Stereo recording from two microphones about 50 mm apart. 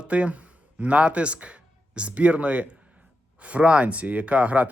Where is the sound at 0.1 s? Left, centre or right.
Right.